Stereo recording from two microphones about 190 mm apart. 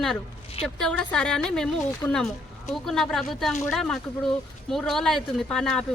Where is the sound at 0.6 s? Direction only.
5° left (ahead or behind).